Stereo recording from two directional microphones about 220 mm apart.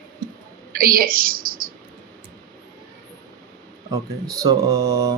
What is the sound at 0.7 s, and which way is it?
Speech, 40° right (ahead or behind).